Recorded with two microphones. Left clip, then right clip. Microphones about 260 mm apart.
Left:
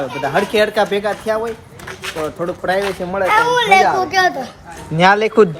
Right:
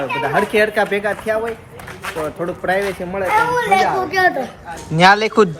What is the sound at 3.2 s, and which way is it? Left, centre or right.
Speech, left.